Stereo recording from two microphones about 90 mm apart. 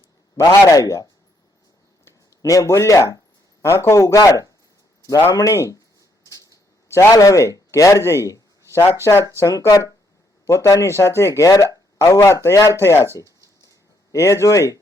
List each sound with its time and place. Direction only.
0.4 s speech: 35° left (ahead or behind)
2.0 s speech: 40° left (ahead or behind)
6.3 s a sound: 35° left (ahead or behind)
7.1 s speech: 40° left (ahead or behind)
9.5 s speech: 40° left (ahead or behind)
14.3 s speech: 35° left (ahead or behind)